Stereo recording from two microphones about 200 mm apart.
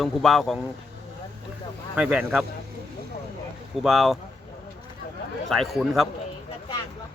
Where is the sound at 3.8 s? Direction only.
Centre (ahead or behind).